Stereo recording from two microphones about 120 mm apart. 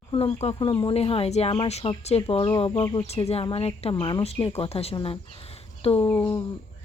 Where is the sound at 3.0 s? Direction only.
60° left (ahead or behind).